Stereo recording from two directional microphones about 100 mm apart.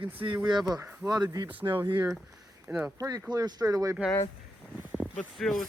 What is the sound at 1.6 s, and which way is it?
Speech, 40° right (ahead or behind).